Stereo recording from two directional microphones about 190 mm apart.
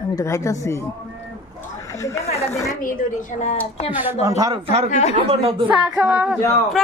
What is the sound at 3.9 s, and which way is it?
Speech, 10° right (ahead or behind).